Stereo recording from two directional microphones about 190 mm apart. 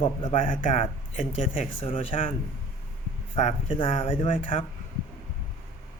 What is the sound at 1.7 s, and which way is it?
Speech, 30° left (ahead or behind).